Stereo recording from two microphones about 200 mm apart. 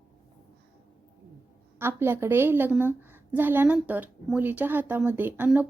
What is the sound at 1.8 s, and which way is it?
A woman's voice, 10° right (ahead or behind).